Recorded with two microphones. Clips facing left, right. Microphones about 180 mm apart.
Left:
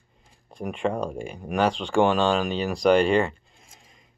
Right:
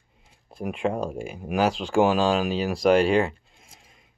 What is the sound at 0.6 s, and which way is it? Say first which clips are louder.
Speech: even; 5° right (ahead or behind).